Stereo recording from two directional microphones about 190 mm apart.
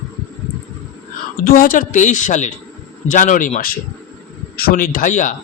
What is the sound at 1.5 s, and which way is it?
A woman's voice, 45° left (ahead or behind).